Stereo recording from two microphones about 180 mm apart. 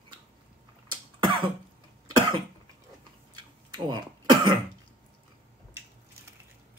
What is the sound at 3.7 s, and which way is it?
Cough, 25° right (ahead or behind).